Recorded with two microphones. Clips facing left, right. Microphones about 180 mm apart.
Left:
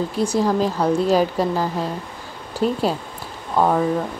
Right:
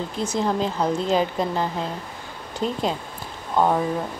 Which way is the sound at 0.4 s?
10° left (ahead or behind).